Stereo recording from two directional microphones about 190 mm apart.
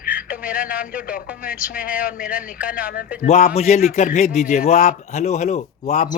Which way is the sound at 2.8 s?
50° left (ahead or behind).